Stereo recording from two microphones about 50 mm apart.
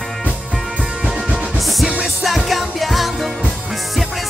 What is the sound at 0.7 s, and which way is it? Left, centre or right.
Music, centre.